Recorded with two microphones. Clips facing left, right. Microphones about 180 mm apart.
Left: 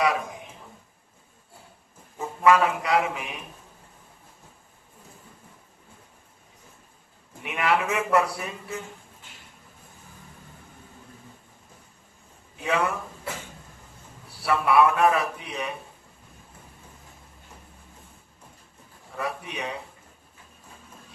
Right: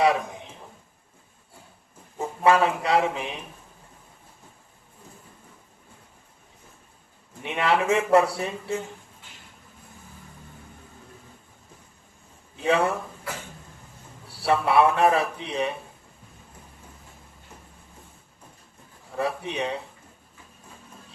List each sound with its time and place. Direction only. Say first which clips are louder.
2.1 s speech: even; 30° right (ahead or behind)
7.4 s a man's voice: right 2 dB; 30° right (ahead or behind)
12.6 s a man's voice: right 3 dB; 30° right (ahead or behind)
14.3 s a man's voice: right 1 dB; 30° right (ahead or behind)
19.1 s a man's voice: right 4 dB; 30° right (ahead or behind)